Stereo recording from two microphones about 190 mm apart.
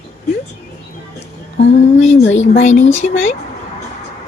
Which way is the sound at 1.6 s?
35° left (ahead or behind).